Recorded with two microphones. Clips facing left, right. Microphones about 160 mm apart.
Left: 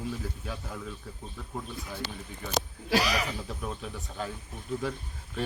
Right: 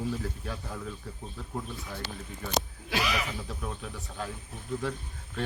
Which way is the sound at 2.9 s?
40° left (ahead or behind).